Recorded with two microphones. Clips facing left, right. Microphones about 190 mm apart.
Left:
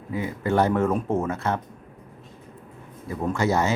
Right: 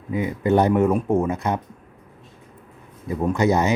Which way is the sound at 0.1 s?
20° right (ahead or behind).